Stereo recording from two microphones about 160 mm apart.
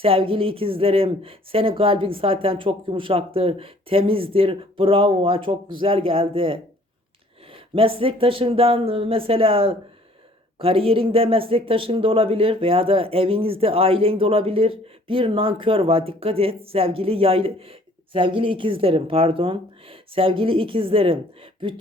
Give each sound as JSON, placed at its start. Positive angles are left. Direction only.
{"t": 0.0, "sound": "speech", "side_deg": -35}